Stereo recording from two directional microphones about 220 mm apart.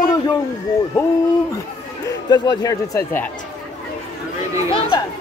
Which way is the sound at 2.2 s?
20° left (ahead or behind).